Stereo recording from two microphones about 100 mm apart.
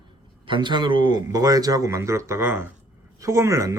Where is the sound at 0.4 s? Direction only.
55° right (ahead or behind).